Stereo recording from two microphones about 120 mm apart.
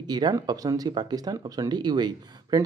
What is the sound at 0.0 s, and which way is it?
Speech, 35° right (ahead or behind).